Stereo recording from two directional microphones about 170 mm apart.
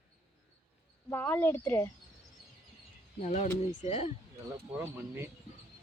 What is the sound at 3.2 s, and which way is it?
Speech, 45° left (ahead or behind).